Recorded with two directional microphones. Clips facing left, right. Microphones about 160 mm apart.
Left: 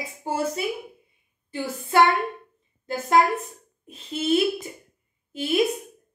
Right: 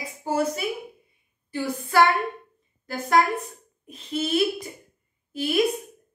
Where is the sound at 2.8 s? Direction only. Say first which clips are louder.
Left 1 dB; 25° left (ahead or behind).